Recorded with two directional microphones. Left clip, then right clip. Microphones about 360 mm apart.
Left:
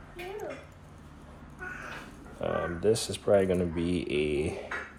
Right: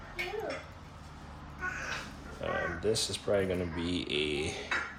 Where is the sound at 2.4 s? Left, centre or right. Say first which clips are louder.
Left 4 dB; centre.